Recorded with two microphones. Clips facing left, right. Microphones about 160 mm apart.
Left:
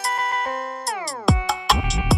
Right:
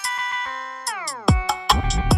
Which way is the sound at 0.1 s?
45° left (ahead or behind).